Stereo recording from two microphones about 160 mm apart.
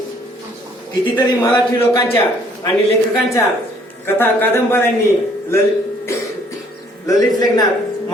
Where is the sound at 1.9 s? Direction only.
20° left (ahead or behind).